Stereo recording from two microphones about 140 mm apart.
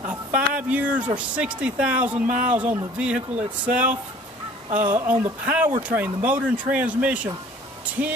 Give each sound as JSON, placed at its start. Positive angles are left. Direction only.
{"t": 0.0, "sound": "a sound", "side_deg": -10}
{"t": 1.1, "sound": "speech", "side_deg": -10}
{"t": 4.6, "sound": "speech", "side_deg": -65}
{"t": 4.9, "sound": "speech", "side_deg": -15}